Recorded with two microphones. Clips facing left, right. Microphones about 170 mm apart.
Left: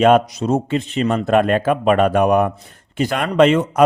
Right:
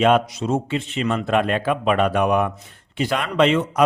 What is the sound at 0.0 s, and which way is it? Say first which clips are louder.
A man's voice: left 4 dB; 40° left (ahead or behind).